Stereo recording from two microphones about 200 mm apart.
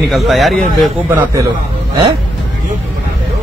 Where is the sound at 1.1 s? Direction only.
15° right (ahead or behind).